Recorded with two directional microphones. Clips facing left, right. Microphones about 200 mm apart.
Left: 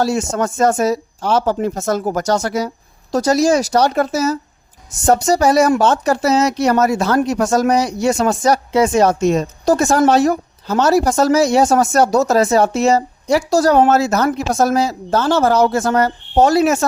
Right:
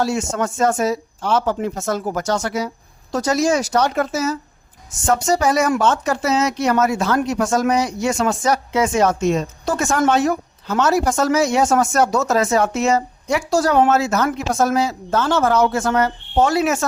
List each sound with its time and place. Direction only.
0.0 s speech: 40° left (ahead or behind)